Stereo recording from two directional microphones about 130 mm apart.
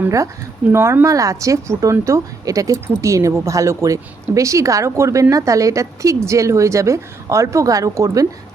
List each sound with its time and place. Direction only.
0.7 s speech: 20° right (ahead or behind)